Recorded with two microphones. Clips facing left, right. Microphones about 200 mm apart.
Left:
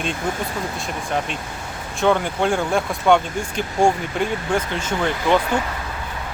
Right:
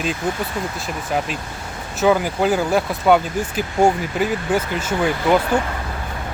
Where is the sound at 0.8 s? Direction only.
5° right (ahead or behind).